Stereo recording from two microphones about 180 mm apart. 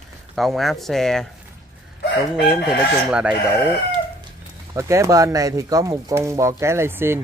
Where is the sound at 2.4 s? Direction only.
5° right (ahead or behind).